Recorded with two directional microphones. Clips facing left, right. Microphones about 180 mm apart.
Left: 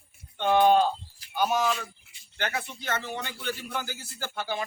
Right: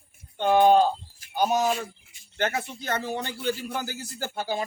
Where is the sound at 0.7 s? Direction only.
40° right (ahead or behind).